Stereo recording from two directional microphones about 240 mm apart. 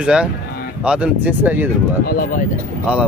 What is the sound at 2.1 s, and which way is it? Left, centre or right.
Speech, left.